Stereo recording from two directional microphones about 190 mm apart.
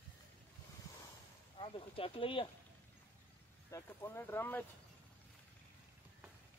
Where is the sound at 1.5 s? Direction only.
30° left (ahead or behind).